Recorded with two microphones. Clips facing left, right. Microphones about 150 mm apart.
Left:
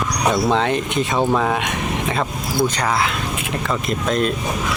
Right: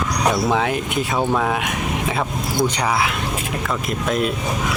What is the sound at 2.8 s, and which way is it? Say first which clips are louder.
Speech: even; 10° right (ahead or behind).